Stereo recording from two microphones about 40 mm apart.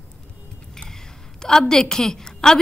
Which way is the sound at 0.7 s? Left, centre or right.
Centre.